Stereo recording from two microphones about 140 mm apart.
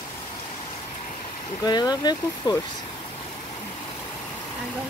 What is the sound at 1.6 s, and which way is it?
Speech, 30° left (ahead or behind).